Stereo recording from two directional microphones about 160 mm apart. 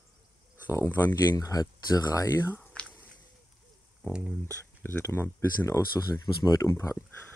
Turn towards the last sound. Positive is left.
turn(degrees=15)  # may be behind; listen again after turning